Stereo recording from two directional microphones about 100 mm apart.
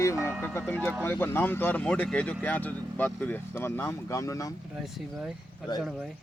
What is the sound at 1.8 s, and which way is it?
Speech, 10° left (ahead or behind).